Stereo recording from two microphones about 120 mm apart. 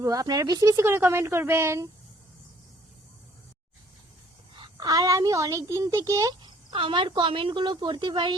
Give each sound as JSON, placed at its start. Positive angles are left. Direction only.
{"t": 0.0, "sound": "a child's voice", "side_deg": -30}
{"t": 4.5, "sound": "a child's voice", "side_deg": -40}
{"t": 6.7, "sound": "a woman's voice", "side_deg": -45}